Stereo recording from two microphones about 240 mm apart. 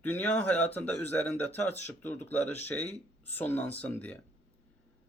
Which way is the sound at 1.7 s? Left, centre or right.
Left.